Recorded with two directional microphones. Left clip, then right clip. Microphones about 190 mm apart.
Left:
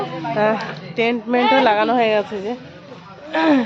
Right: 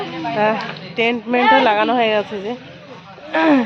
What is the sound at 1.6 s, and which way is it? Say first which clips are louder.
Speech: even; 5° right (ahead or behind).